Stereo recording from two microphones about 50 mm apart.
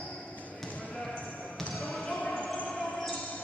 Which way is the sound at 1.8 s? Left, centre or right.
Centre.